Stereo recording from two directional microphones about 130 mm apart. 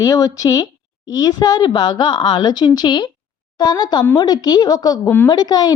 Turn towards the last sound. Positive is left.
turn(degrees=30)  # may be behind; listen again after turning